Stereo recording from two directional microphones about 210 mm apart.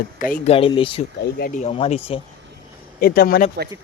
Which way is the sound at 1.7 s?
30° left (ahead or behind).